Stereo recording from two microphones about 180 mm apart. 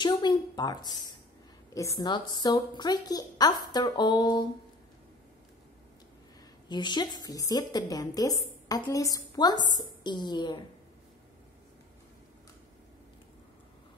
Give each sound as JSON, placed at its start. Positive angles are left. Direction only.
{"t": 0.0, "sound": "a woman's voice", "side_deg": 25}
{"t": 6.7, "sound": "a woman's voice", "side_deg": 25}